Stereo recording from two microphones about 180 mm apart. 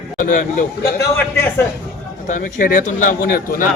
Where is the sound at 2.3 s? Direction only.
45° left (ahead or behind).